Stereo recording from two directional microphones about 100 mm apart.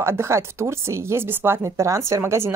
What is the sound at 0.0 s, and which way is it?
A woman's voice, 25° right (ahead or behind).